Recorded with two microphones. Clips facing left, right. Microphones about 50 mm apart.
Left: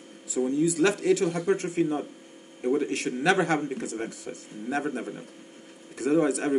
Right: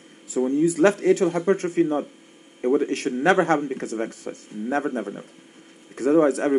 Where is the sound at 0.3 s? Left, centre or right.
Right.